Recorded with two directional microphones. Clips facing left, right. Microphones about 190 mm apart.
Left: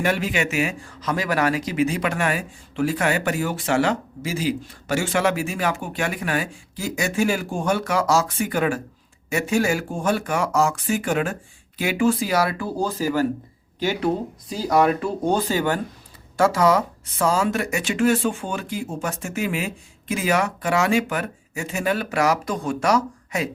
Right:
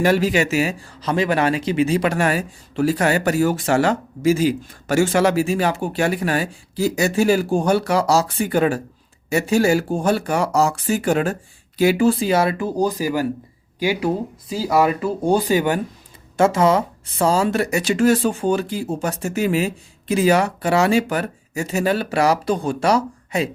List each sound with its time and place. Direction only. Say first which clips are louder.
0.0 s speech: right 6 dB; 35° right (ahead or behind)